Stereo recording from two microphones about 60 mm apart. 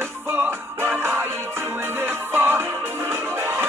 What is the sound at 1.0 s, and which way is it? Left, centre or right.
Music, right.